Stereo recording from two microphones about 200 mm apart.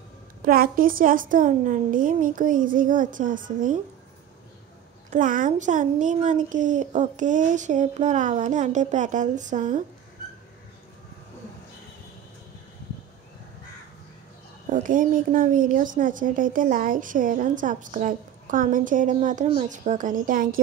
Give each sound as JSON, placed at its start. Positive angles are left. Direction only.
{"t": 0.5, "sound": "a woman's voice", "side_deg": -45}
{"t": 5.1, "sound": "a woman's voice", "side_deg": -40}
{"t": 14.7, "sound": "a woman's voice", "side_deg": -40}